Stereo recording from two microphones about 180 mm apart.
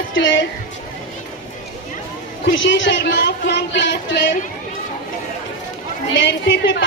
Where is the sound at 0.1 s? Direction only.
90° left.